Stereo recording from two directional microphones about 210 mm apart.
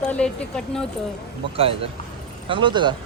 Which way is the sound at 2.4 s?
25° right (ahead or behind).